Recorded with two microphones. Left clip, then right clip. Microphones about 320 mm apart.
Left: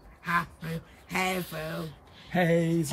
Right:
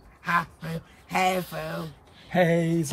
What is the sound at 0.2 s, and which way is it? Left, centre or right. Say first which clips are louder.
Speech: right 3 dB; centre.